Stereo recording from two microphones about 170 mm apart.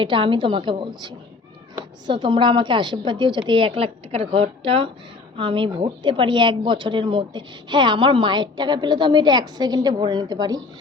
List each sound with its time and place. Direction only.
0.0 s speech: 30° right (ahead or behind)